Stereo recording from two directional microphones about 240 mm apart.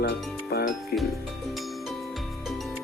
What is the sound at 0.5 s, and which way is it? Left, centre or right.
Speech, left.